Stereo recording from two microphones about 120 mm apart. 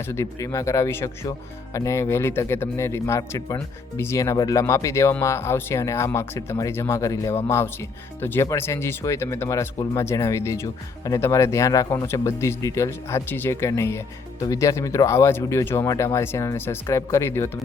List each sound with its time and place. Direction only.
0.1 s speech: 25° left (ahead or behind)